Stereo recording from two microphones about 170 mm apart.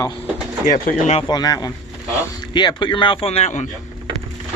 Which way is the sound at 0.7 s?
45° left (ahead or behind).